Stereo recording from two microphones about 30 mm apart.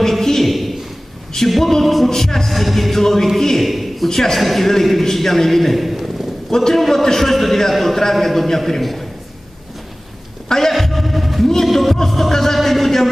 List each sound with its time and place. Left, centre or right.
0.1 s a sound: centre
0.5 s a sound: centre
1.8 s music: centre
2.0 s music: centre
3.3 s a man's voice: centre
6.7 s a man's voice: centre
10.7 s music: centre
12.0 s a man's voice: centre
12.5 s music: centre